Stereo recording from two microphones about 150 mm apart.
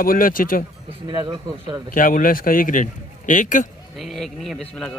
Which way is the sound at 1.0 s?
30° right (ahead or behind).